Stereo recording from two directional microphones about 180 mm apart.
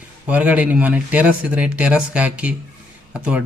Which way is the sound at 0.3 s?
10° right (ahead or behind).